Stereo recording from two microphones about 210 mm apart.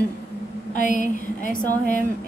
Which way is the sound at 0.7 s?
40° left (ahead or behind).